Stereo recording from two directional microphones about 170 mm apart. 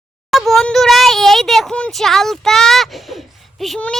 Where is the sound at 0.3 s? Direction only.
Centre (ahead or behind).